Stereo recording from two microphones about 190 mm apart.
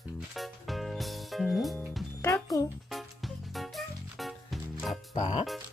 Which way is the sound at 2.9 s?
Centre (ahead or behind).